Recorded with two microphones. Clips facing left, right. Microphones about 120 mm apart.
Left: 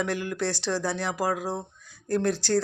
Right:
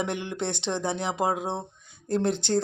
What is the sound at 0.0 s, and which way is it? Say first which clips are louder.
Speech: left 1 dB; 20° right (ahead or behind).